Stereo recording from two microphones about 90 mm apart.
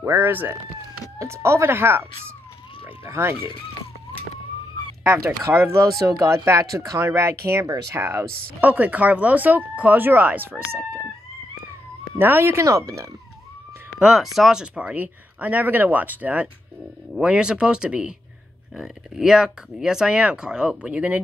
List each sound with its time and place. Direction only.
0.0 s a sound: 25° right (ahead or behind)
1.2 s speech: 30° right (ahead or behind)
3.1 s speech: 25° right (ahead or behind)
5.4 s speech: 25° right (ahead or behind)
8.5 s speech: 20° right (ahead or behind)
12.2 s speech: 25° right (ahead or behind)
14.0 s speech: 5° right (ahead or behind)